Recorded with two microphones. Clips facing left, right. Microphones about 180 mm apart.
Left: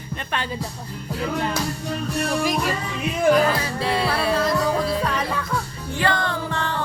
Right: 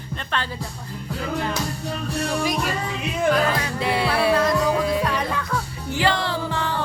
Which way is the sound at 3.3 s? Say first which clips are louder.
Left 4 dB; 5° left (ahead or behind).